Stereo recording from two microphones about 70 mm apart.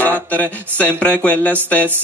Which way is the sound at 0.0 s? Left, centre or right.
Left.